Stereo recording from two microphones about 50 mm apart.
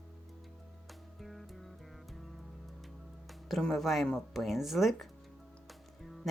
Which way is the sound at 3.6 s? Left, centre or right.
Centre.